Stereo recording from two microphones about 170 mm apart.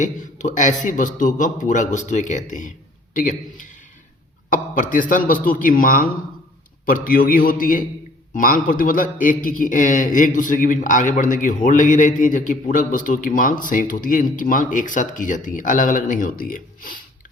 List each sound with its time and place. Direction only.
0.0 s a man's voice: 45° left (ahead or behind)